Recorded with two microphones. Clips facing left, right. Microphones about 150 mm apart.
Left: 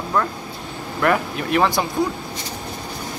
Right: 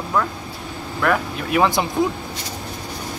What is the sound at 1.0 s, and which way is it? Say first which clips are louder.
Speech: left 1 dB; centre (ahead or behind).